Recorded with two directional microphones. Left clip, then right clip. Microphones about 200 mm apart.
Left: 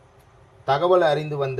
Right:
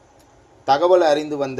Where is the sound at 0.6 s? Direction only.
30° right (ahead or behind).